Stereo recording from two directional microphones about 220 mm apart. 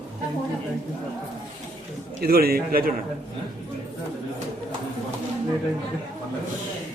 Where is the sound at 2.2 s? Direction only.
45° right (ahead or behind).